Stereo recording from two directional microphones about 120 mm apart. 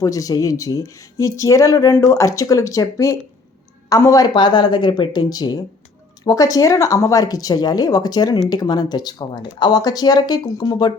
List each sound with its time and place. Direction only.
0.0 s speech: 30° left (ahead or behind)